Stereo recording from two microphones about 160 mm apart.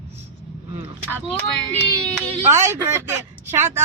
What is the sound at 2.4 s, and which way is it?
Speech, 15° right (ahead or behind).